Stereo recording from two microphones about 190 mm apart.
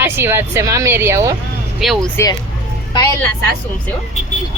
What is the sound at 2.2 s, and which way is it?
Speech, 15° left (ahead or behind).